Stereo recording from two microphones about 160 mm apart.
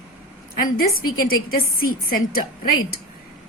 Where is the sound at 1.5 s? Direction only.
65° left (ahead or behind).